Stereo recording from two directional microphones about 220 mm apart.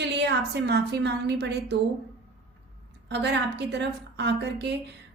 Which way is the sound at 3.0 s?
50° right (ahead or behind).